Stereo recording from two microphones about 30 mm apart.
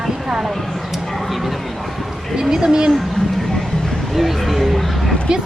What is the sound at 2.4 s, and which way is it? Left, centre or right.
Speech, centre.